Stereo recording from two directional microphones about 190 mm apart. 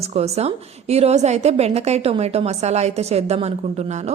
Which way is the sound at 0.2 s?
35° right (ahead or behind).